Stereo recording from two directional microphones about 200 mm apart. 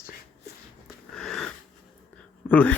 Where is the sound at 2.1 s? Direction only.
5° left (ahead or behind).